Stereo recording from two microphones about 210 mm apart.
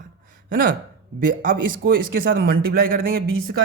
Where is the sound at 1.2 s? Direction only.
40° right (ahead or behind).